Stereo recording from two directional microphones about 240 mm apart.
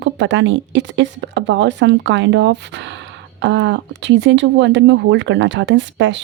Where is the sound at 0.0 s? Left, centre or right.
Right.